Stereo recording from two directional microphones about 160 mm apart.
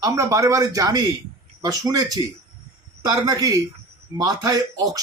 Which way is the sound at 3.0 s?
25° right (ahead or behind).